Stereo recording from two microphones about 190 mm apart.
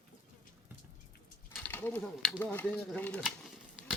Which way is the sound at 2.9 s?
10° left (ahead or behind).